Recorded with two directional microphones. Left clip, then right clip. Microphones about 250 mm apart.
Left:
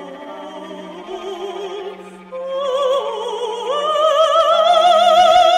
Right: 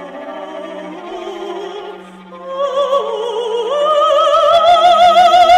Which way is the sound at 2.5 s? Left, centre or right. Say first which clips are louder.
Right 3 dB; left.